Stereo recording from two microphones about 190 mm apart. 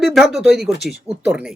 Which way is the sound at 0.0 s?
Centre (ahead or behind).